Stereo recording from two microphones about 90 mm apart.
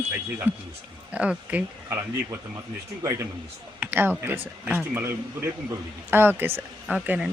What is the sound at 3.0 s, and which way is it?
Speech, 35° right (ahead or behind).